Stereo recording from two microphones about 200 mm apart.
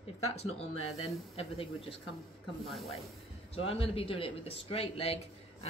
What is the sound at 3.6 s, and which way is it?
A woman's voice, 30° left (ahead or behind).